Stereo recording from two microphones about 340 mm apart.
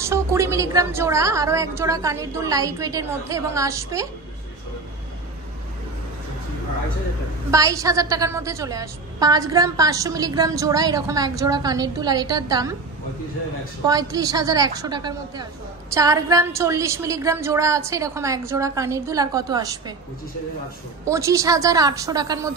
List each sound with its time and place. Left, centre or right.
0.0 s a woman's voice: centre
7.5 s a woman's voice: centre
13.8 s a woman's voice: centre
21.0 s a woman's voice: centre